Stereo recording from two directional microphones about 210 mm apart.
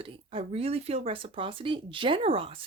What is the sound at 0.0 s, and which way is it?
Speech, 25° right (ahead or behind).